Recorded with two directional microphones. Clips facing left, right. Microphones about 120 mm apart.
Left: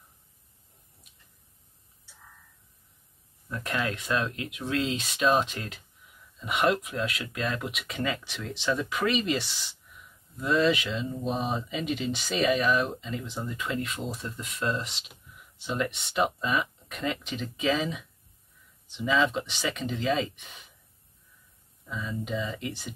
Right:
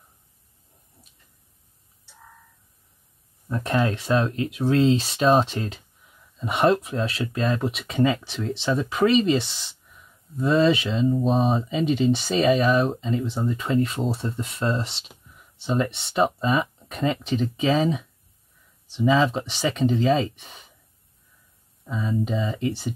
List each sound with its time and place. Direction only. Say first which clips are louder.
3.4 s speech: right 7 dB; 30° right (ahead or behind)
21.8 s speech: right 8 dB; 30° right (ahead or behind)